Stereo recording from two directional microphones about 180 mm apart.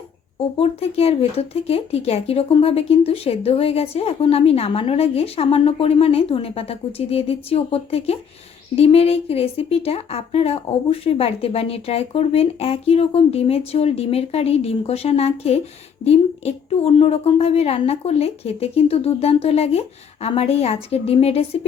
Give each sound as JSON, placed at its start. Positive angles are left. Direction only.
{"t": 0.6, "sound": "speech", "side_deg": 35}